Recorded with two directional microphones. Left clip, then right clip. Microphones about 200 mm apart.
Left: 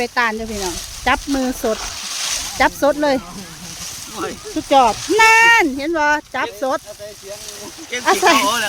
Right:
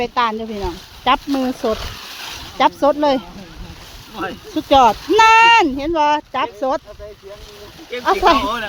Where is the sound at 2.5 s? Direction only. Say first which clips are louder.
Right 1 dB; centre (ahead or behind).